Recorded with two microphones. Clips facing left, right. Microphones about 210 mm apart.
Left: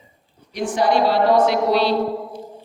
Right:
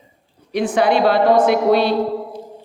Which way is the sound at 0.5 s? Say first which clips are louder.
Right 3 dB; 60° right (ahead or behind).